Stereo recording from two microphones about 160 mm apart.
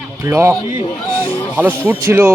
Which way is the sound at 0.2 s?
15° right (ahead or behind).